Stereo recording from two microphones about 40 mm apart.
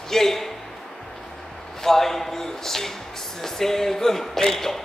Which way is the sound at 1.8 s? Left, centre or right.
Centre.